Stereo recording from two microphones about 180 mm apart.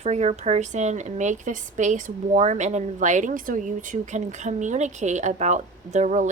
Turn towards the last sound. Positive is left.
turn(degrees=-40)  # may be behind; listen again after turning